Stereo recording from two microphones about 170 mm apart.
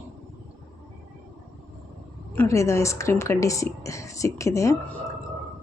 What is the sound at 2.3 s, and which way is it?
Speech, 15° left (ahead or behind).